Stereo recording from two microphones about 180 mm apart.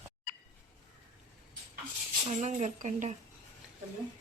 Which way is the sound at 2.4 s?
40° right (ahead or behind).